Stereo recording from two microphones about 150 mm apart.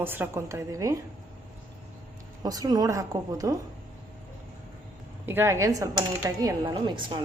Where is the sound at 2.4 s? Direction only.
25° right (ahead or behind).